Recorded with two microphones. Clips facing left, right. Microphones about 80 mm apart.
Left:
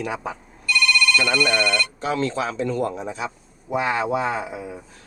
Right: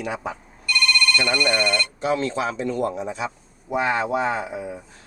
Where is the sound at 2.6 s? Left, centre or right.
Left.